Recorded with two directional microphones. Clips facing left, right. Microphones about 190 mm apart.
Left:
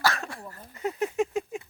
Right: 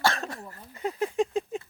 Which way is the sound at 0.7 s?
30° right (ahead or behind).